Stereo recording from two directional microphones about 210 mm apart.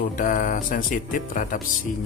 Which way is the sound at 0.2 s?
40° left (ahead or behind).